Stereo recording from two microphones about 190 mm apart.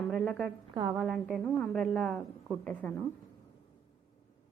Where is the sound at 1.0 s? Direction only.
5° right (ahead or behind).